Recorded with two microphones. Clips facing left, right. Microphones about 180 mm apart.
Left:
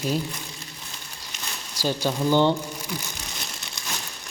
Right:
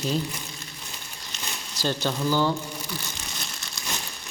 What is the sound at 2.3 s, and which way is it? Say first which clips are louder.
Speech: left 5 dB; 25° left (ahead or behind).